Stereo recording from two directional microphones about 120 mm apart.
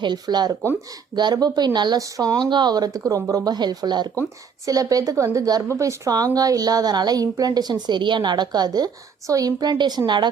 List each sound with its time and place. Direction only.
0.0 s a woman's voice: 40° right (ahead or behind)